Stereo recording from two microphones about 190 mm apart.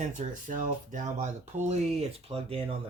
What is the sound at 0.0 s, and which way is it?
Speech, 40° right (ahead or behind).